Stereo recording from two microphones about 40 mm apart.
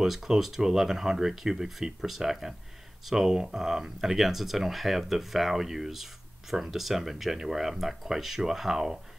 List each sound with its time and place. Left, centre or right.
0.0 s speech: centre